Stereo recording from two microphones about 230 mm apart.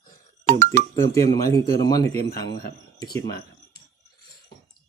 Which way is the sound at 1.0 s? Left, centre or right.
Centre.